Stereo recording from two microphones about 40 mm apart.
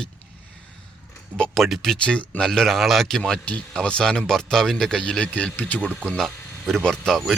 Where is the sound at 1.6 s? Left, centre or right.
Centre.